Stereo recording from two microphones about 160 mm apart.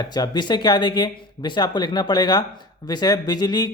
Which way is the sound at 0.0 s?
25° left (ahead or behind).